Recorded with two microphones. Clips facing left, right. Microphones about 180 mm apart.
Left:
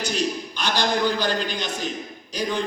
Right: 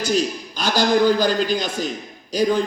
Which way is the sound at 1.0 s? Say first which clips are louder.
Right 6 dB; 40° right (ahead or behind).